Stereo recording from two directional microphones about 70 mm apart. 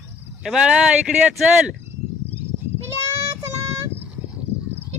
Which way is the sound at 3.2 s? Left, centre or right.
Right.